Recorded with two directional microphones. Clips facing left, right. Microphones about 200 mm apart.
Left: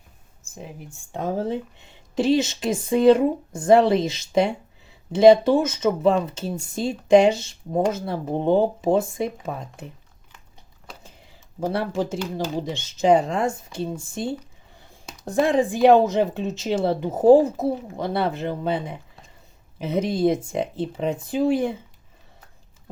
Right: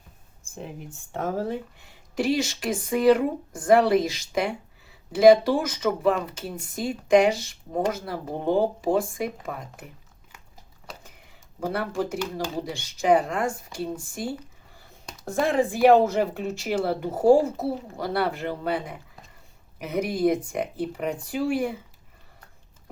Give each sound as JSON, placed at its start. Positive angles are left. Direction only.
{"t": 0.5, "sound": "speech", "side_deg": 10}
{"t": 11.6, "sound": "speech", "side_deg": 25}